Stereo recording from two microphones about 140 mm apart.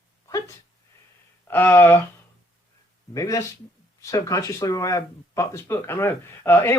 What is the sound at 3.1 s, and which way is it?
Speech, 25° left (ahead or behind).